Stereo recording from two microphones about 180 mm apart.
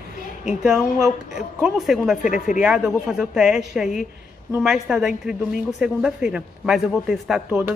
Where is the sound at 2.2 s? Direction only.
45° left (ahead or behind).